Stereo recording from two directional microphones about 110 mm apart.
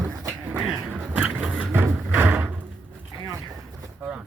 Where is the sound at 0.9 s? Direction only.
15° right (ahead or behind).